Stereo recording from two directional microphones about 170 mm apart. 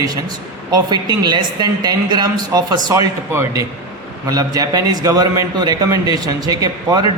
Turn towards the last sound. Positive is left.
turn(degrees=-20)  # may be behind; listen again after turning